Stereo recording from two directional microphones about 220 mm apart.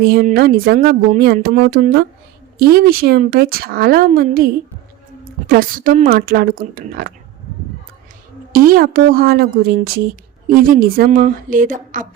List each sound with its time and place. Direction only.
0.0 s a woman's voice: 40° right (ahead or behind)
8.5 s a woman's voice: 40° right (ahead or behind)